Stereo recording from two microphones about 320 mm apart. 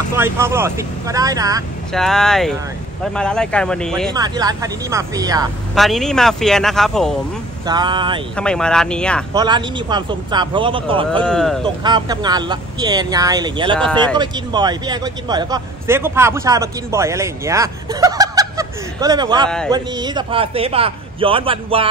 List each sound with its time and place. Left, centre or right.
0.1 s a man's voice: centre
1.9 s speech: centre
4.1 s a man's voice: centre
5.8 s speech: centre
7.6 s a man's voice: centre
8.4 s speech: centre
9.3 s a man's voice: centre
11.2 s speech: centre
11.6 s a man's voice: centre